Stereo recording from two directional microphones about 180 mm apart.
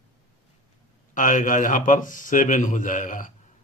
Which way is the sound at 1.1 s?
45° left (ahead or behind).